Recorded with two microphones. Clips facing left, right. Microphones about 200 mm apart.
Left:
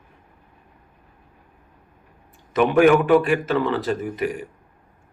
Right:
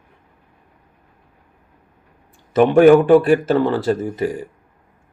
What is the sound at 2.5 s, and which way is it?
A man's voice, 30° right (ahead or behind).